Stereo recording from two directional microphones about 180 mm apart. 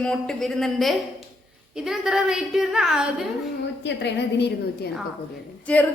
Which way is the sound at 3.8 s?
70° left (ahead or behind).